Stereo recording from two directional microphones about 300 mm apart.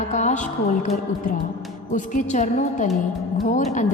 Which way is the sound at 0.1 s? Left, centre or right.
Left.